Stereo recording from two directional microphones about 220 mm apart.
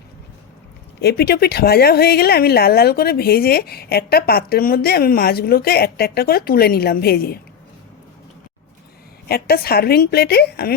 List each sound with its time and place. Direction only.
1.0 s speech: 45° left (ahead or behind)
9.3 s speech: 45° left (ahead or behind)